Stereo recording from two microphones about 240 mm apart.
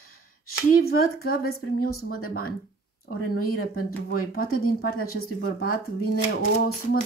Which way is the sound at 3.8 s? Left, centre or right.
Left.